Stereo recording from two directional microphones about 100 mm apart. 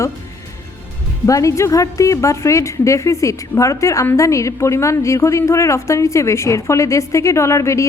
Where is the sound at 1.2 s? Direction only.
30° left (ahead or behind).